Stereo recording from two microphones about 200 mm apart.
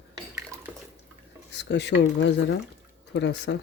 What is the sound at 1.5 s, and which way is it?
Speech, 60° left (ahead or behind).